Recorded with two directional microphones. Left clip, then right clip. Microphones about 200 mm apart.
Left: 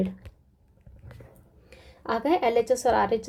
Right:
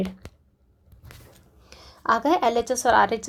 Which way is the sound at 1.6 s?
15° right (ahead or behind).